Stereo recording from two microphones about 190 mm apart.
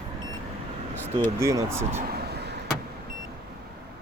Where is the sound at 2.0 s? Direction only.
55° right (ahead or behind).